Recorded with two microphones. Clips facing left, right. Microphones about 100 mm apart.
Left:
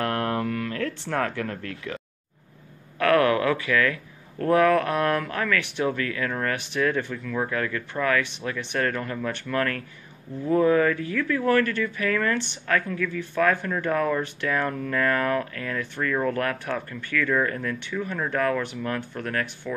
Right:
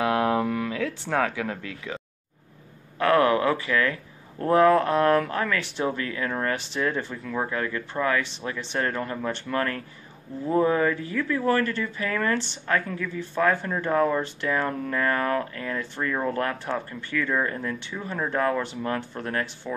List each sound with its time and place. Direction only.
0.0 s a sound: 10° right (ahead or behind)
0.7 s speech: 5° right (ahead or behind)
3.0 s speech: 25° right (ahead or behind)